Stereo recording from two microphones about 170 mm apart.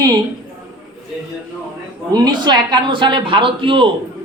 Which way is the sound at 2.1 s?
25° right (ahead or behind).